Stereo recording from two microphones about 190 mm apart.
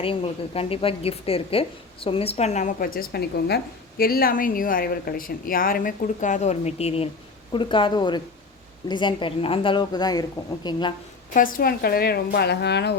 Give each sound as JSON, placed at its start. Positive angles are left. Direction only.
{"t": 0.0, "sound": "a woman's voice", "side_deg": 30}
{"t": 11.3, "sound": "a woman's voice", "side_deg": 50}